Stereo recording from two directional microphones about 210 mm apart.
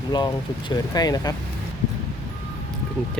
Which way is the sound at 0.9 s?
20° left (ahead or behind).